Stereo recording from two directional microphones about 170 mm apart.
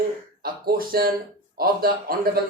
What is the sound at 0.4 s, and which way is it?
A man's voice, 60° right (ahead or behind).